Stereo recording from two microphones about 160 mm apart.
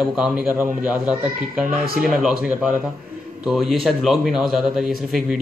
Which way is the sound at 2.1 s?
5° right (ahead or behind).